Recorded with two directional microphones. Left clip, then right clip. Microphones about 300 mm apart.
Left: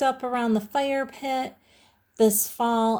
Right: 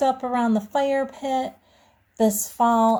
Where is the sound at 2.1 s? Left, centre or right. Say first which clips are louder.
Even; left.